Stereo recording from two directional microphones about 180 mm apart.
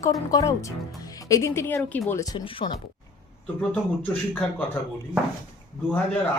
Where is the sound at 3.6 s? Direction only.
5° left (ahead or behind).